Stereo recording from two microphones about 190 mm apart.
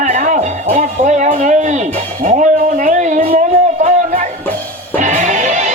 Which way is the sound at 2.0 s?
40° right (ahead or behind).